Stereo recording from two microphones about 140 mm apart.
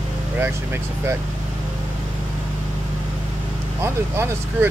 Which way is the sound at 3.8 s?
20° right (ahead or behind).